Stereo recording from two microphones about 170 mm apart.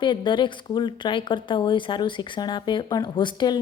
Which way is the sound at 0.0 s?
25° left (ahead or behind).